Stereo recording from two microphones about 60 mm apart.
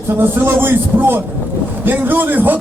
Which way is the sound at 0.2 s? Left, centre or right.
Right.